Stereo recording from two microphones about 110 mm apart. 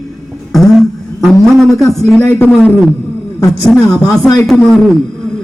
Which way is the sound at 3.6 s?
5° left (ahead or behind).